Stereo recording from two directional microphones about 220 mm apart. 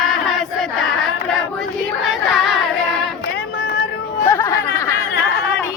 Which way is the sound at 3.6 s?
45° left (ahead or behind).